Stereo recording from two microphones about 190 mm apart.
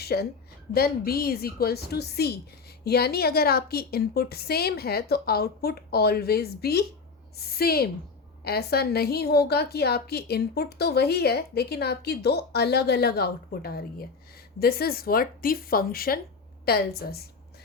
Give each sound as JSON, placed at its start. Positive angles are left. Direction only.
{"t": 0.0, "sound": "a woman's voice", "side_deg": 55}